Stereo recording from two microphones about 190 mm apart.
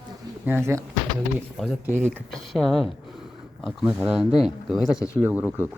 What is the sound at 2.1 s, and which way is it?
Speech, centre (ahead or behind).